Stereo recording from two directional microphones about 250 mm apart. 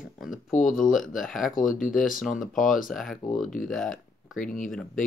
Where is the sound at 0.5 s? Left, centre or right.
Left.